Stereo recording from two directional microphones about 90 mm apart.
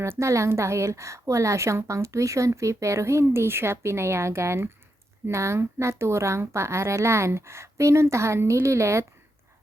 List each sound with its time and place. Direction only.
0.0 s a woman's voice: 35° right (ahead or behind)